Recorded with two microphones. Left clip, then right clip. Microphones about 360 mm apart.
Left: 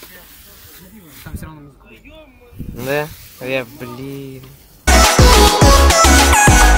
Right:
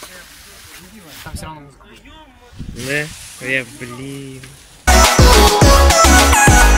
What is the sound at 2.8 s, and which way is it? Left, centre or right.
Speech, left.